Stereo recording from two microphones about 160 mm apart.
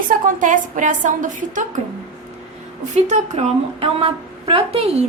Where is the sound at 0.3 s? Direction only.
55° right (ahead or behind).